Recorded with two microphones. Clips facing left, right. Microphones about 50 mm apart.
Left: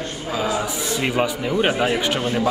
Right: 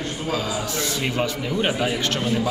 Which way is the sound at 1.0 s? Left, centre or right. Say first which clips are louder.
Left 6 dB; centre.